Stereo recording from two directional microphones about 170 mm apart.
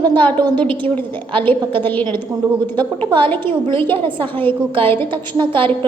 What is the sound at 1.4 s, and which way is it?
Speech, 10° left (ahead or behind).